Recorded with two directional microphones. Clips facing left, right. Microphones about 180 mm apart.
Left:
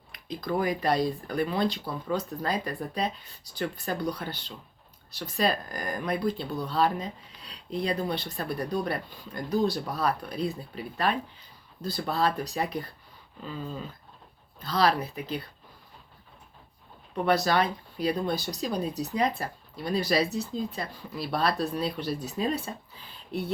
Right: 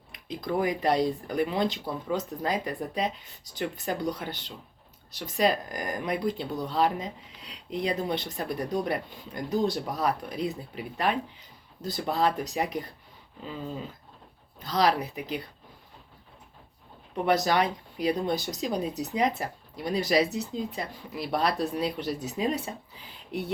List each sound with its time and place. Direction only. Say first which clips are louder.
0.1 s speech: even; 20° right (ahead or behind)
17.2 s speech: even; 20° right (ahead or behind)